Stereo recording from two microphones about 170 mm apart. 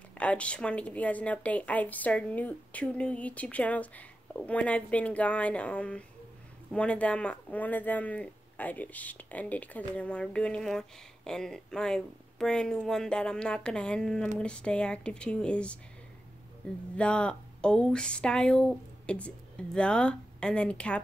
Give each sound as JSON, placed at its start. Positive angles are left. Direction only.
{"t": 0.2, "sound": "speech", "side_deg": 5}
{"t": 16.9, "sound": "speech", "side_deg": 5}